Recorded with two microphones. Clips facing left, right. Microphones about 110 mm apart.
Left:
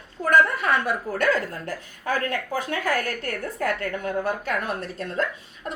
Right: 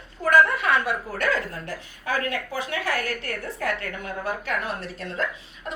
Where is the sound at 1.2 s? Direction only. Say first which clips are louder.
Left 5 dB; 40° left (ahead or behind).